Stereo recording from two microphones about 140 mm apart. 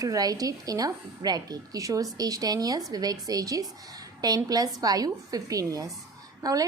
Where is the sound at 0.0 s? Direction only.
25° right (ahead or behind).